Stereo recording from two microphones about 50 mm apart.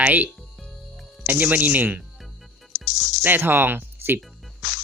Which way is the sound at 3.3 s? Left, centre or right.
Right.